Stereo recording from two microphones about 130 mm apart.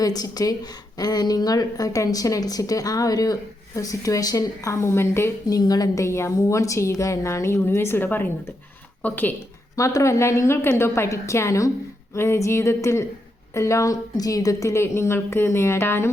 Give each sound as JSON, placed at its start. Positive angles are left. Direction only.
{"t": 0.0, "sound": "a woman's voice", "side_deg": 30}
{"t": 9.7, "sound": "a woman's voice", "side_deg": 25}